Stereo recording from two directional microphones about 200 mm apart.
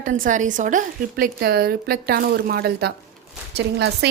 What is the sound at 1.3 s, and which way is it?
A woman's voice, 50° right (ahead or behind).